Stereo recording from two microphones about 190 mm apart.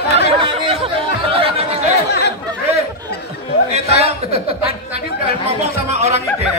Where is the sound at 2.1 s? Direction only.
60° left (ahead or behind).